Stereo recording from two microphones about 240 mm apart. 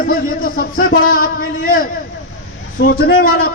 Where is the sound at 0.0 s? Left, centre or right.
Left.